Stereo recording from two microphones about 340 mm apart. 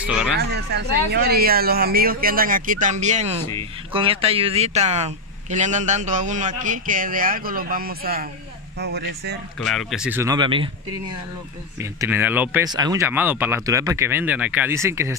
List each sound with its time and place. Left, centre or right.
0.0 s speech: centre
0.4 s speech: right
9.6 s speech: centre
11.8 s speech: centre